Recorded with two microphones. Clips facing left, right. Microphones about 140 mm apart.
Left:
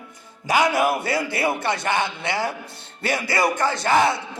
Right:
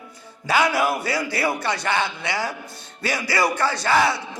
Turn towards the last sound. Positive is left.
turn(degrees=20)  # may be behind; listen again after turning